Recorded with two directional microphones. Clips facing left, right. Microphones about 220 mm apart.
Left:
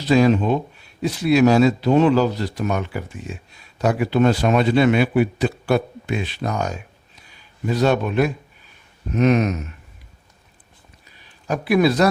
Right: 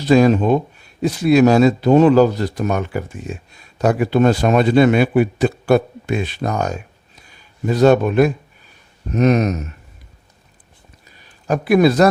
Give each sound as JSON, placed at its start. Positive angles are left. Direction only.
{"t": 0.0, "sound": "a man's voice", "side_deg": -45}
{"t": 11.4, "sound": "a man's voice", "side_deg": -45}